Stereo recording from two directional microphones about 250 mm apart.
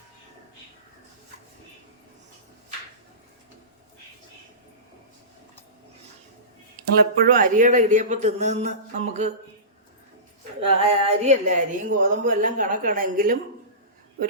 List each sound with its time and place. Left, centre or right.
7.2 s a man's voice: right
10.8 s speech: right